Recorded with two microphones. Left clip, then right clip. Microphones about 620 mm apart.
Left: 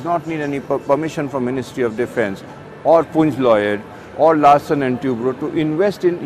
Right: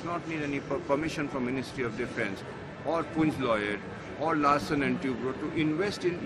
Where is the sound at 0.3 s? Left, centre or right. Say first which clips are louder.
Left 12 dB; left.